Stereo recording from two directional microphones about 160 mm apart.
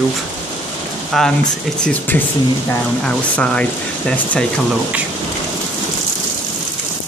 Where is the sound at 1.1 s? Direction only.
Centre (ahead or behind).